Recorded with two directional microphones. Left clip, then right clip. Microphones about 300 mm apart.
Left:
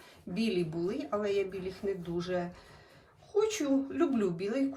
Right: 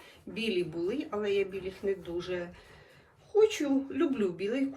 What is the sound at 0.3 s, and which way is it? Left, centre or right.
Speech, centre.